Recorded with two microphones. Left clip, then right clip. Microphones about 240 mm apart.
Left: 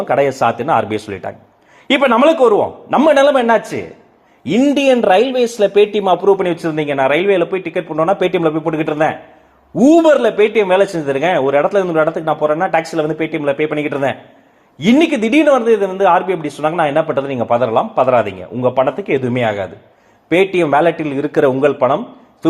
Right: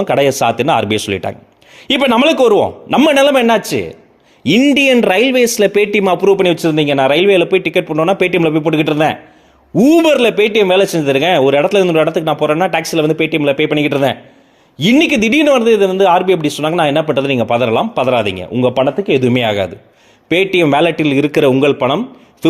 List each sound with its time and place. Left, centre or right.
0.0 s speech: right
18.3 s speech: centre
18.6 s speech: right
18.9 s speech: right
19.2 s speech: right